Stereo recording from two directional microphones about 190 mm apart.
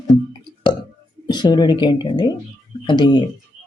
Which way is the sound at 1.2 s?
20° left (ahead or behind).